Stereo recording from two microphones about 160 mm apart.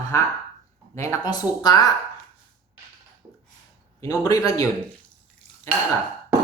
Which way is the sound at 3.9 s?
20° left (ahead or behind).